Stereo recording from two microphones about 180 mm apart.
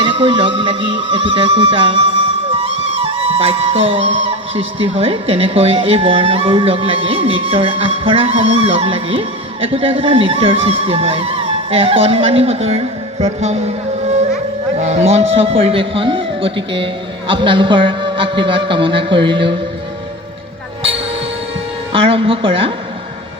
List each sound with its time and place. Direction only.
0.0 s a man's voice: 30° right (ahead or behind)
2.6 s music: 30° right (ahead or behind)
14.8 s a man's voice: 40° right (ahead or behind)
21.9 s music: 30° right (ahead or behind)